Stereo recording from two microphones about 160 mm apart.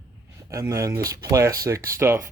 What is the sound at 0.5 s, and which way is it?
Speech, 20° right (ahead or behind).